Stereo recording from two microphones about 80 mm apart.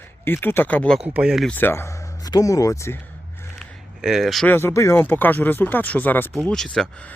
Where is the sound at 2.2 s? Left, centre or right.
Left.